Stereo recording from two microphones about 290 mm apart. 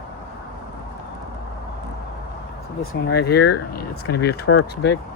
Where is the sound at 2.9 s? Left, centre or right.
Left.